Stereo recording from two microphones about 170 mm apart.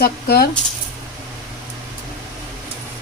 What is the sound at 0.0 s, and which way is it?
Speech, 65° left (ahead or behind).